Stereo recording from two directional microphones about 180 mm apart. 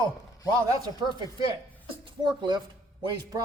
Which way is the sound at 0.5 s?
15° right (ahead or behind).